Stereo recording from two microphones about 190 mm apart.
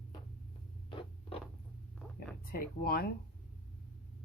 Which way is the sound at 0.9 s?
25° left (ahead or behind).